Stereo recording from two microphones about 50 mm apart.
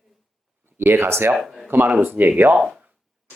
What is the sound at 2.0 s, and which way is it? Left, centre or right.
Speech, right.